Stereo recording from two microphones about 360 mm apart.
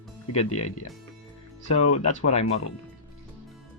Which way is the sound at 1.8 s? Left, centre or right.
Left.